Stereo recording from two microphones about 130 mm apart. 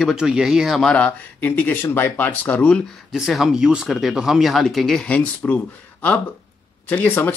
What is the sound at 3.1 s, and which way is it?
Speech, 5° right (ahead or behind).